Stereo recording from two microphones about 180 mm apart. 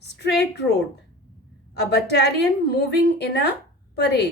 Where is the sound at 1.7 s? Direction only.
65° left (ahead or behind).